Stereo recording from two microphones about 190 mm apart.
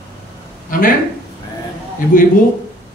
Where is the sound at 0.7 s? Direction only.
45° left (ahead or behind).